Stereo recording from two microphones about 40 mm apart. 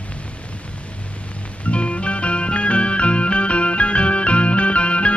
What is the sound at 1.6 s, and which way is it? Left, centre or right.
Music, left.